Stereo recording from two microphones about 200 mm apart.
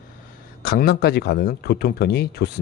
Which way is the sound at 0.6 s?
50° left (ahead or behind).